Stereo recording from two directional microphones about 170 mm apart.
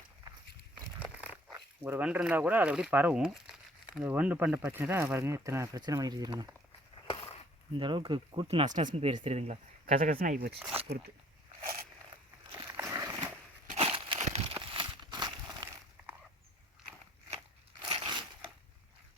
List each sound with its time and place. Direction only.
0.9 s dog: 10° right (ahead or behind)
1.8 s speech: 10° right (ahead or behind)
7.1 s a sound: 35° left (ahead or behind)
7.7 s speech: 30° right (ahead or behind)
8.6 s speech: 45° right (ahead or behind)
9.0 s speech: 35° right (ahead or behind)
10.0 s speech: 55° right (ahead or behind)
11.6 s zipper: 60° right (ahead or behind)
12.5 s a sound: 15° right (ahead or behind)
13.7 s a sound: 35° right (ahead or behind)
17.8 s crumpling: 25° right (ahead or behind)